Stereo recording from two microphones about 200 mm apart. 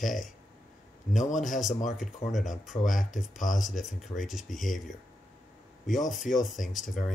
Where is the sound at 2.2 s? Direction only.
55° left (ahead or behind).